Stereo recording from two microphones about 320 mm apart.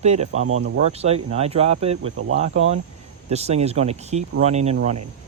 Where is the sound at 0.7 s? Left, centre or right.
Centre.